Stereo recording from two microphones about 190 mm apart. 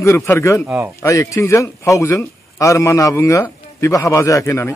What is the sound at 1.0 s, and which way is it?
A man's voice, 15° left (ahead or behind).